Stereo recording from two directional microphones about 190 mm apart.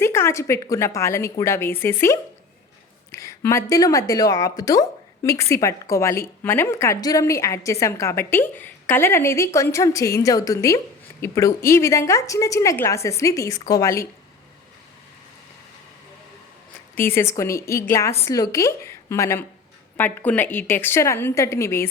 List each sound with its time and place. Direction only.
0.0 s a woman's voice: 15° left (ahead or behind)
16.9 s a woman's voice: 10° left (ahead or behind)